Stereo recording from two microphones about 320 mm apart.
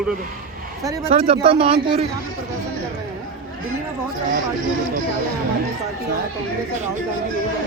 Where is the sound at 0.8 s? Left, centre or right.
Centre.